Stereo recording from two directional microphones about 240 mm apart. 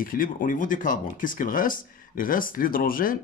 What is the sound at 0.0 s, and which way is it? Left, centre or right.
Speech, left.